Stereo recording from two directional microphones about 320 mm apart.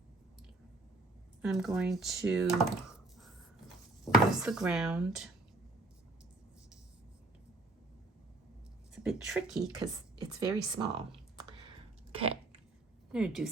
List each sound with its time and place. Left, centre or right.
1.4 s speech: centre
9.0 s speech: centre
9.8 s speech: centre
12.1 s chewing: centre
13.1 s a woman's voice: centre